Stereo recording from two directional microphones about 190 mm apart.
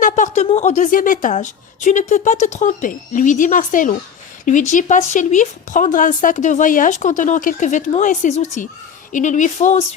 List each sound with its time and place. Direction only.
0.0 s a woman's voice: 40° left (ahead or behind)